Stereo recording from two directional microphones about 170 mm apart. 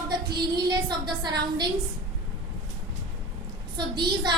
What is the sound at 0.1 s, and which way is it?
A woman's voice, 25° right (ahead or behind).